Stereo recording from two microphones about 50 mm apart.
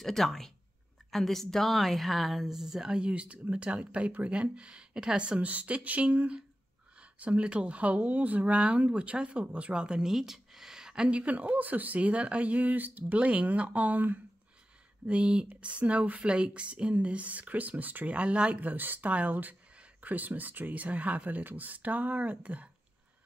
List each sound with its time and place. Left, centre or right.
0.0 s a woman's voice: centre
3.0 s speech: right
10.1 s a sound: centre
11.1 s speech: right
15.0 s speech: right